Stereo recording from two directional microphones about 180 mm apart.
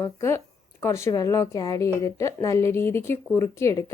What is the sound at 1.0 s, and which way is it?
A woman's voice, 20° left (ahead or behind).